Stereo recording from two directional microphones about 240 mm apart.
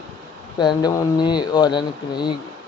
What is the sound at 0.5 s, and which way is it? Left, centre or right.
Speech, centre.